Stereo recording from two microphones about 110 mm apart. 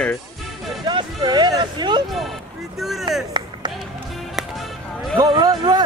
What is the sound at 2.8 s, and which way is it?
Speech, centre (ahead or behind).